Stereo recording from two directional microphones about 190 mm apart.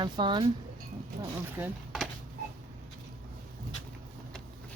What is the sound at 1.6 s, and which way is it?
Speech, 10° right (ahead or behind).